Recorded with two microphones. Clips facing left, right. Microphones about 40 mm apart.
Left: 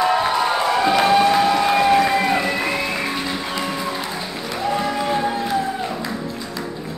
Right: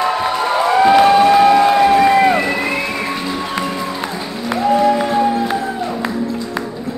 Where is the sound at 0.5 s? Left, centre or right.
Centre.